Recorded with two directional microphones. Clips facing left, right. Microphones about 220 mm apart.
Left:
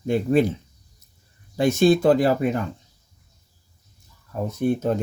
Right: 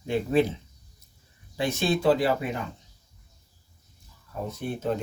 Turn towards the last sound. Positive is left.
turn(degrees=45)  # may be behind; listen again after turning